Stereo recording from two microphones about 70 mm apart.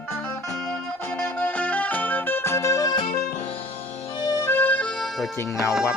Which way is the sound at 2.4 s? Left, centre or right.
Left.